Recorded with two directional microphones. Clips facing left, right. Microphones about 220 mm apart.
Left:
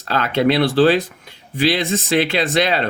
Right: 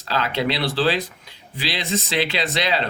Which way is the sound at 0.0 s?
50° left (ahead or behind).